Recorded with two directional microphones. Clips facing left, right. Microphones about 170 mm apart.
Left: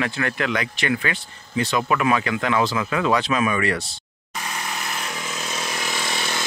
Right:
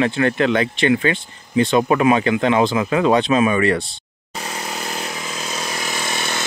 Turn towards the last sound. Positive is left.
turn(degrees=-50)  # may be behind; listen again after turning